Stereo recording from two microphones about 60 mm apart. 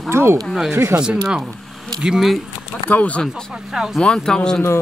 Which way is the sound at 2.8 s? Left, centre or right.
Left.